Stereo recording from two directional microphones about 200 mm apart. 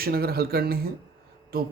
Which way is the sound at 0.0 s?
50° right (ahead or behind).